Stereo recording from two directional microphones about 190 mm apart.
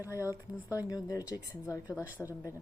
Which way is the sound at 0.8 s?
20° left (ahead or behind).